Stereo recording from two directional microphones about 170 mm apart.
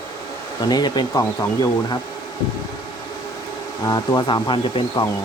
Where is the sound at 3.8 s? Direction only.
25° left (ahead or behind).